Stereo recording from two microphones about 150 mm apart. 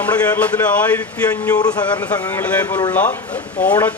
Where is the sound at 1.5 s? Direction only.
25° left (ahead or behind).